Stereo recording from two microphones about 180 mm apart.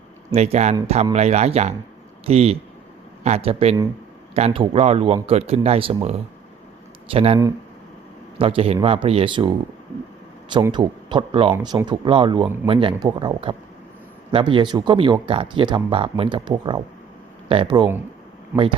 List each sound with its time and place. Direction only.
0.3 s speech: 35° right (ahead or behind)
8.4 s speech: 30° right (ahead or behind)